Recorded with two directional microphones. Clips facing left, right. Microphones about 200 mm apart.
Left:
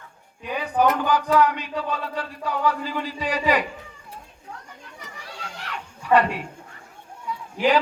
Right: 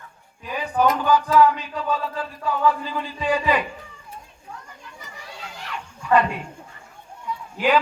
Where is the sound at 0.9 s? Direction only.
60° left (ahead or behind).